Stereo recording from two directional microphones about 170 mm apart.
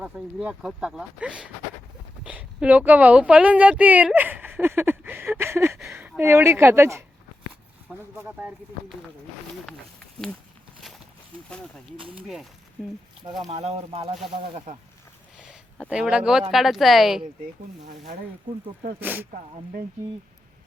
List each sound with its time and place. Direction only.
0.0 s a woman's voice: 5° right (ahead or behind)
12.1 s speech: centre (ahead or behind)
13.5 s speech: 40° right (ahead or behind)
15.4 s speech: 5° right (ahead or behind)
18.9 s speech: 10° right (ahead or behind)